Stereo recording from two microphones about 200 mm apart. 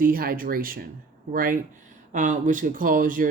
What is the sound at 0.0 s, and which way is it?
Speech, 45° right (ahead or behind).